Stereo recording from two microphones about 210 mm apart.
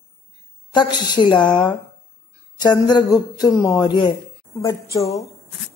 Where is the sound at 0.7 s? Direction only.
20° left (ahead or behind).